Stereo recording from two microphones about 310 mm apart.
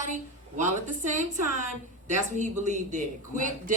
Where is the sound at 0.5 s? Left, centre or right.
Right.